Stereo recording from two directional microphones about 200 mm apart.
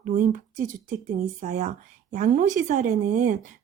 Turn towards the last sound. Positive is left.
turn(degrees=-40)  # may be behind; listen again after turning